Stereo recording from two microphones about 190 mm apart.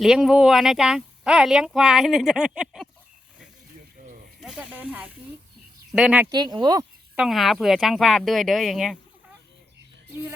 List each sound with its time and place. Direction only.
0.0 s speech: 5° right (ahead or behind)
4.4 s speech: 5° right (ahead or behind)
6.3 s speech: 25° right (ahead or behind)
7.2 s speech: centre (ahead or behind)